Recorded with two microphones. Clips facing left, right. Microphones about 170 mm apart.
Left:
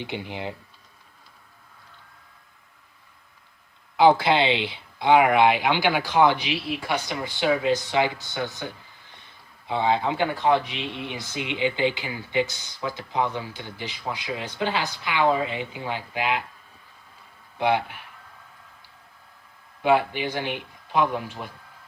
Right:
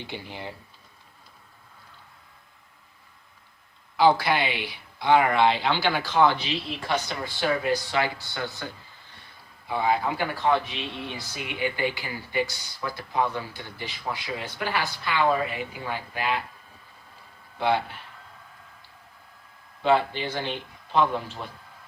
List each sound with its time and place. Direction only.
0.0 s speech: 20° left (ahead or behind)
3.9 s speech: 20° left (ahead or behind)
17.6 s speech: 15° left (ahead or behind)
19.8 s speech: 10° left (ahead or behind)